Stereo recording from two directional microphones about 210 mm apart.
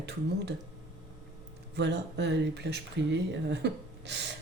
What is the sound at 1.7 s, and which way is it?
Speech, 55° right (ahead or behind).